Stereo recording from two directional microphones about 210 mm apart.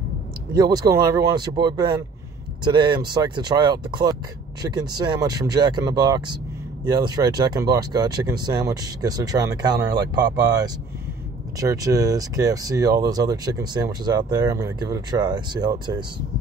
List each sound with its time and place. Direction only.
0.6 s speech: 20° right (ahead or behind)